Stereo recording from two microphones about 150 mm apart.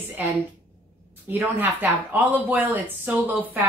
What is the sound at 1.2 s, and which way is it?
A woman's voice, 15° right (ahead or behind).